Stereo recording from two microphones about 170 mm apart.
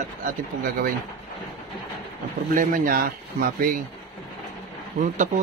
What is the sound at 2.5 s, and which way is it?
Speech, 50° right (ahead or behind).